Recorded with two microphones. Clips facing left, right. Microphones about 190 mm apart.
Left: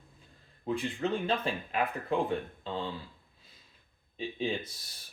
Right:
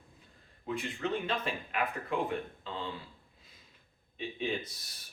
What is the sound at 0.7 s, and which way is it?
Speech, 30° left (ahead or behind).